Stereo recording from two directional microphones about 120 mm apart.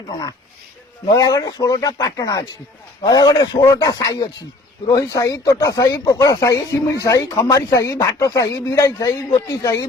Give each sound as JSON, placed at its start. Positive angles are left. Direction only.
{"t": 1.1, "sound": "speech", "side_deg": 30}